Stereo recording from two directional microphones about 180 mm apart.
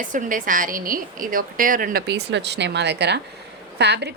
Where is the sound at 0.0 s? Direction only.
45° right (ahead or behind).